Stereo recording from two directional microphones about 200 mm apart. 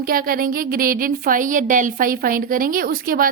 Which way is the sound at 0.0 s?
45° right (ahead or behind).